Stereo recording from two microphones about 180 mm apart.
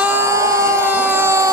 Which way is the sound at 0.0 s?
10° right (ahead or behind).